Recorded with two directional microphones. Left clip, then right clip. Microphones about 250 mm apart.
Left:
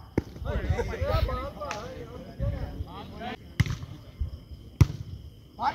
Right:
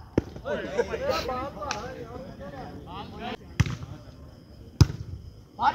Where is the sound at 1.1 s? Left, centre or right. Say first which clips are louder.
Right 3 dB; right.